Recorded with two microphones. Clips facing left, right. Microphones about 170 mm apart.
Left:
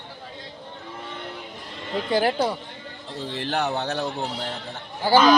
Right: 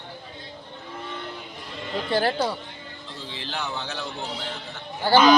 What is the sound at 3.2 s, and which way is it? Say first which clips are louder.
Speech: left 7 dB; 60° left (ahead or behind).